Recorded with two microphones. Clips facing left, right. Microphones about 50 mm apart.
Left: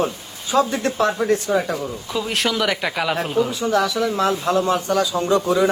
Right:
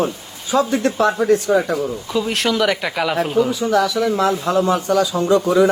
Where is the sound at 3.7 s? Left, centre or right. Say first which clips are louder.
Right 3 dB; right.